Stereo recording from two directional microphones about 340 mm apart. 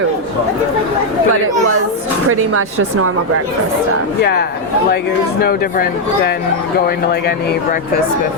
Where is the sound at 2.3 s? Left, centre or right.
Right.